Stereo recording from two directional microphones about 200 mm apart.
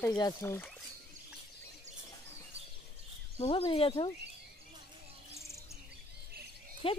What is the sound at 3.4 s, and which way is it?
Speech, 30° left (ahead or behind).